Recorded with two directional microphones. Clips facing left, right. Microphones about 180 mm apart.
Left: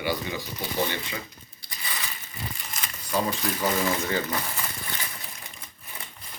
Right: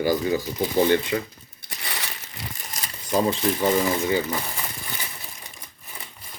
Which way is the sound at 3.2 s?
25° right (ahead or behind).